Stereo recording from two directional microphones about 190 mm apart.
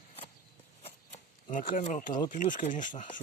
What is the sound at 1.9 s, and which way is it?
Speech, 45° left (ahead or behind).